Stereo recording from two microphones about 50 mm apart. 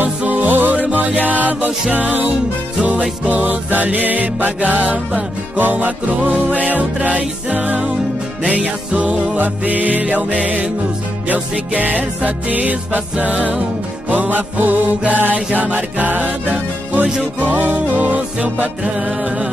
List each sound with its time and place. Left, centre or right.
0.0 s music: right